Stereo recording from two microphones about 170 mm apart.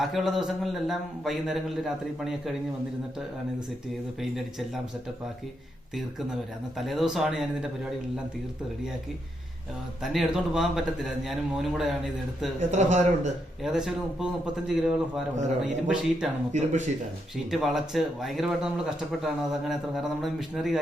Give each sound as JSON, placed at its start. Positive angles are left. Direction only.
{"t": 0.0, "sound": "speech", "side_deg": 0}
{"t": 6.7, "sound": "speech", "side_deg": 0}
{"t": 10.0, "sound": "speech", "side_deg": 0}
{"t": 12.7, "sound": "a man's voice", "side_deg": -40}
{"t": 13.6, "sound": "speech", "side_deg": -5}
{"t": 16.5, "sound": "a man's voice", "side_deg": -45}
{"t": 17.5, "sound": "speech", "side_deg": 0}